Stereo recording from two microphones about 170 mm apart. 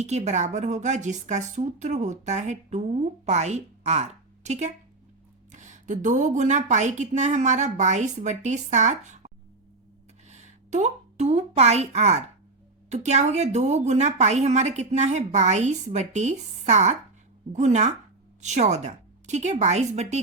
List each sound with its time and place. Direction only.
0.0 s speech: 40° right (ahead or behind)